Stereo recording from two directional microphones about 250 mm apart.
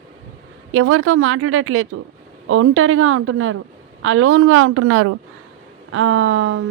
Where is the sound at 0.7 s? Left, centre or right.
Right.